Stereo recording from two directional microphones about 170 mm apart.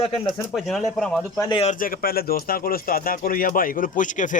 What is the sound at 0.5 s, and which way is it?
Speech, centre (ahead or behind).